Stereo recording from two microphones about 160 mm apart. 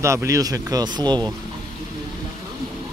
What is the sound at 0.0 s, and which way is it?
Speech, 20° right (ahead or behind).